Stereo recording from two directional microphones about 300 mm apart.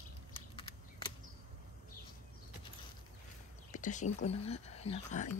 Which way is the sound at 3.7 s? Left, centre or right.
Left.